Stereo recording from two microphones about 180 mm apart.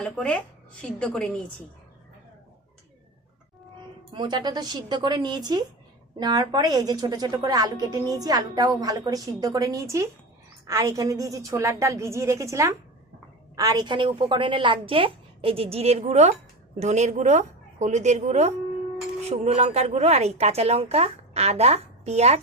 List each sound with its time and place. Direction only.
0.0 s a woman's voice: 5° left (ahead or behind)
4.1 s a woman's voice: 25° right (ahead or behind)